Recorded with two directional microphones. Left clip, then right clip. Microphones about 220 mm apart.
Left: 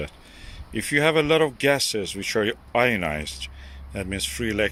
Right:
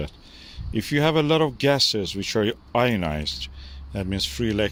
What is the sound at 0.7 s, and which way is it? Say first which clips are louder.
Speech: left 1 dB; 20° right (ahead or behind).